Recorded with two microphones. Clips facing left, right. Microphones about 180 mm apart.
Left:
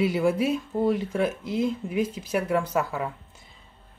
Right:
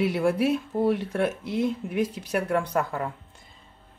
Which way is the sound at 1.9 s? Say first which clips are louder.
Even; 75° right (ahead or behind).